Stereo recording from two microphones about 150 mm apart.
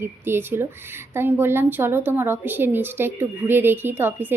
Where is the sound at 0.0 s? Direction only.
15° right (ahead or behind).